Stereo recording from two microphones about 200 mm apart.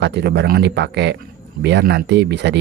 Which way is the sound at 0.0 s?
55° right (ahead or behind).